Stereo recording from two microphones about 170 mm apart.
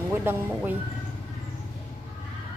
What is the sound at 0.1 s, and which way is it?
Speech, 10° right (ahead or behind).